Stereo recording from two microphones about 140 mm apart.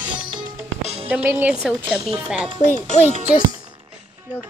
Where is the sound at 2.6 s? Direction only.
60° left (ahead or behind).